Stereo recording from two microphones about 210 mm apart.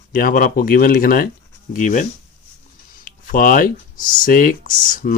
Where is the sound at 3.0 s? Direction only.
40° left (ahead or behind).